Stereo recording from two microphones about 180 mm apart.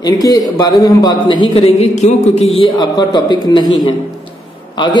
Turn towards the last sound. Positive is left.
turn(degrees=25)  # may be behind; listen again after turning